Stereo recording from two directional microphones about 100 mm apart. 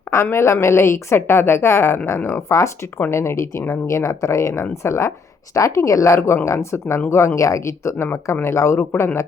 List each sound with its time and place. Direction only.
0.1 s a woman's voice: 25° left (ahead or behind)